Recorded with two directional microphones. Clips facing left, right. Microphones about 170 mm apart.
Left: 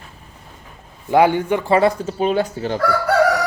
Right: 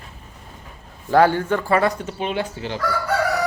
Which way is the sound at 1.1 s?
15° left (ahead or behind).